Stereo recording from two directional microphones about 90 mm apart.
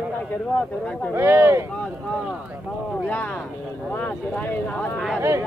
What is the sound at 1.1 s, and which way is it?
Speech, 25° right (ahead or behind).